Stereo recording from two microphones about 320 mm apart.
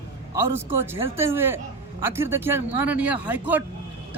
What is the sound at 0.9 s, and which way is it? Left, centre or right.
A man's voice, centre.